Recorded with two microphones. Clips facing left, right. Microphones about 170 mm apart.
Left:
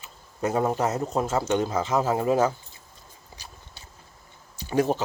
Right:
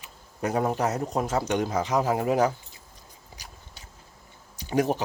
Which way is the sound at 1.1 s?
15° right (ahead or behind).